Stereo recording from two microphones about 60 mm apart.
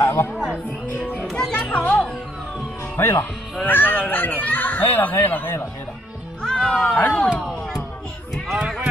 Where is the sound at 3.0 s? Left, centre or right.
Left.